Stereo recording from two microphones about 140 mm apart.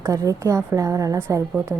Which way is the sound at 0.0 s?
25° right (ahead or behind).